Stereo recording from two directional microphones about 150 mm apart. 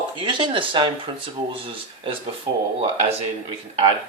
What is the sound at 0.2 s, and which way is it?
Speech, 30° right (ahead or behind).